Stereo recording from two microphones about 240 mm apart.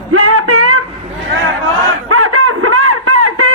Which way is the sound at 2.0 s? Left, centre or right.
Right.